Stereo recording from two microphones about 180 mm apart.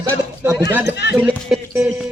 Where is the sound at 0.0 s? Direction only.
15° right (ahead or behind).